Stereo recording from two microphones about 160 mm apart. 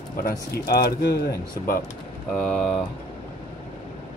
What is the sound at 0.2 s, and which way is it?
Speech, 65° left (ahead or behind).